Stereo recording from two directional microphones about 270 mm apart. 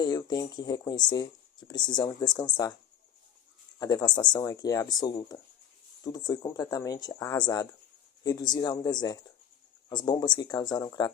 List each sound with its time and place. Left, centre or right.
0.0 s speech: centre
3.8 s speech: centre